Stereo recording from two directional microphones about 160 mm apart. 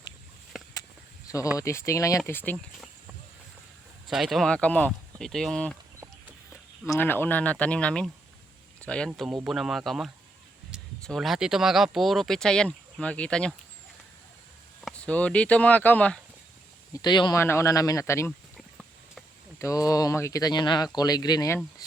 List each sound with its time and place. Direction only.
0.5 s a sound: centre (ahead or behind)
1.5 s speech: 20° left (ahead or behind)
4.0 s speech: centre (ahead or behind)
6.9 s speech: 10° left (ahead or behind)
14.8 s speech: 5° left (ahead or behind)
16.9 s speech: 25° left (ahead or behind)
17.4 s speech: 15° left (ahead or behind)
18.3 s a sound: centre (ahead or behind)
19.5 s speech: 20° left (ahead or behind)